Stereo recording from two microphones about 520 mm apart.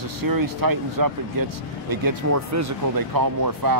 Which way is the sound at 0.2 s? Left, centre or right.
Right.